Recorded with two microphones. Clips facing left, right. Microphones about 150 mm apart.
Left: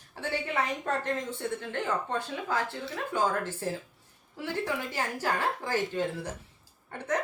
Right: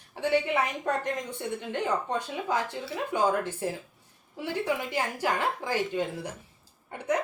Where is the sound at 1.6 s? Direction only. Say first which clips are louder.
Right 2 dB; 15° right (ahead or behind).